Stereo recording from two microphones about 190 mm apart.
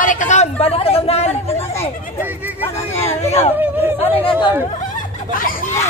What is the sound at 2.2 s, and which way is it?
Speech, 10° right (ahead or behind).